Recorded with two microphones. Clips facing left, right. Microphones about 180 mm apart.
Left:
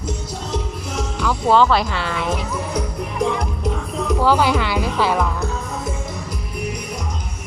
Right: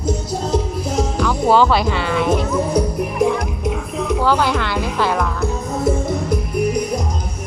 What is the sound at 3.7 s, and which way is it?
Music, 5° right (ahead or behind).